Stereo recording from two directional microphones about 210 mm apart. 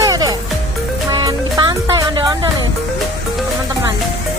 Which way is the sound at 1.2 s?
20° right (ahead or behind).